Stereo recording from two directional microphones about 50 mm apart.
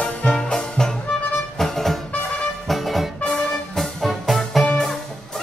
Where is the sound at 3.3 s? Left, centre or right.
Centre.